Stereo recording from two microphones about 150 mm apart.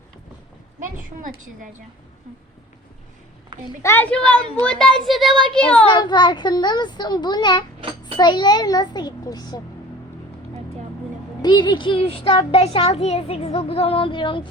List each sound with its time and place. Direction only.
0.8 s a woman's voice: 60° right (ahead or behind)
3.8 s a woman's voice: 10° left (ahead or behind)
5.9 s a child's voice: 30° left (ahead or behind)
11.4 s a child's voice: 30° left (ahead or behind)